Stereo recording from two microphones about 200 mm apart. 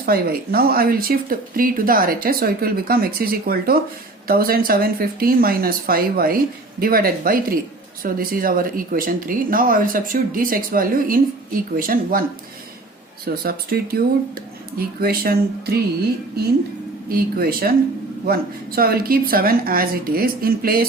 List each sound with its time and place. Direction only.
0.0 s speech: 50° right (ahead or behind)
13.2 s speech: 50° right (ahead or behind)
17.1 s speech: 50° right (ahead or behind)